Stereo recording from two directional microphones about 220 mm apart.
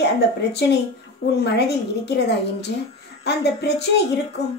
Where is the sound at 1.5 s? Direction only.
50° left (ahead or behind).